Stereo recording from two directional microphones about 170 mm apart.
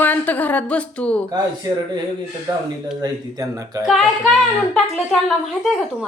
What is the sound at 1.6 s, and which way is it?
Speech, 20° right (ahead or behind).